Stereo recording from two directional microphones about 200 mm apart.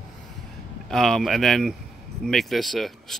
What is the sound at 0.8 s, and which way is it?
Speech, centre (ahead or behind).